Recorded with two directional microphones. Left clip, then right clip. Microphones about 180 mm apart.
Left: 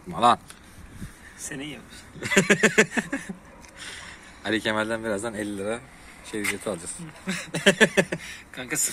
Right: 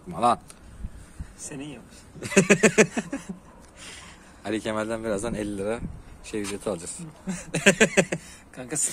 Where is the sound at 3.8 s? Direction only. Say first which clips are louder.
Left 4 dB; centre (ahead or behind).